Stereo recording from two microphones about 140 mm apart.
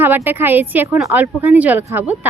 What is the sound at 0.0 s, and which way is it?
Speech, 15° right (ahead or behind).